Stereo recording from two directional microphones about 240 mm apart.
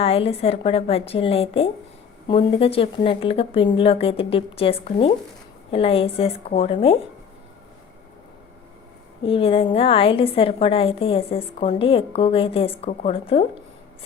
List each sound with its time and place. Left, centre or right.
0.0 s a woman's voice: left
9.2 s a woman's voice: left